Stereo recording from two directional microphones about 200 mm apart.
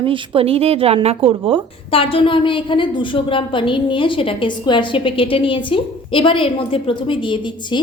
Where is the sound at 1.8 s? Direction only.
25° left (ahead or behind).